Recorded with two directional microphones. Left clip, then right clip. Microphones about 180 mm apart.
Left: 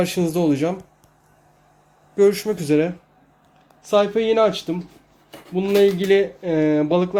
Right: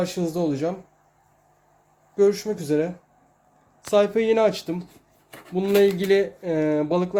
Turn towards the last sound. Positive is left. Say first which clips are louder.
# left 4 dB
turn(degrees=0)  # may be behind; listen again after turning